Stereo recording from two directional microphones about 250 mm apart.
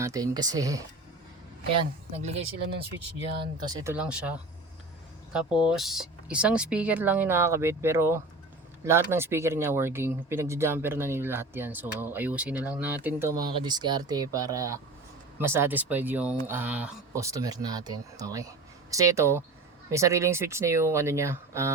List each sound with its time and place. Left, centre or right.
0.0 s speech: centre
3.3 s speech: centre
3.9 s speech: centre
5.5 s speech: centre